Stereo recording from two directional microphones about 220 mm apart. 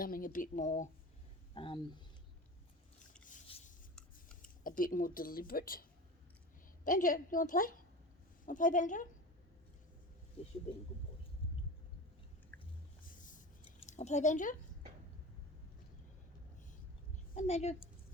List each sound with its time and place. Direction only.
0.0 s speech: 40° left (ahead or behind)
1.5 s speech: 20° left (ahead or behind)
3.2 s rub: 30° left (ahead or behind)
4.6 s speech: 40° left (ahead or behind)
6.8 s speech: 35° left (ahead or behind)
12.5 s chewing: 10° left (ahead or behind)
13.1 s a sound: 35° left (ahead or behind)
13.7 s a woman's voice: 30° left (ahead or behind)
17.3 s speech: 30° left (ahead or behind)